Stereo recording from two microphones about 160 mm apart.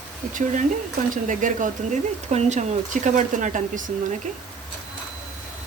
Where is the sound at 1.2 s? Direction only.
55° right (ahead or behind).